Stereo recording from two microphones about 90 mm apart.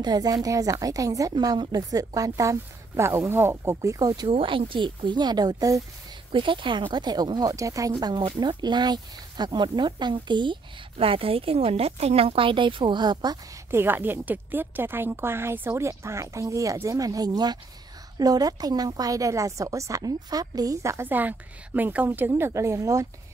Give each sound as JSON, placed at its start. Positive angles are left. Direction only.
{"t": 0.0, "sound": "a woman's voice", "side_deg": -45}
{"t": 4.3, "sound": "speech", "side_deg": -80}
{"t": 6.3, "sound": "speech", "side_deg": -65}
{"t": 8.4, "sound": "a woman's voice", "side_deg": -55}
{"t": 13.7, "sound": "a woman's voice", "side_deg": -25}
{"t": 21.1, "sound": "a woman's voice", "side_deg": -20}
{"t": 22.4, "sound": "a woman's voice", "side_deg": -30}